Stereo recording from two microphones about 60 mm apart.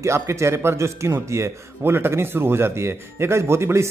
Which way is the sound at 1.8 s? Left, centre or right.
Right.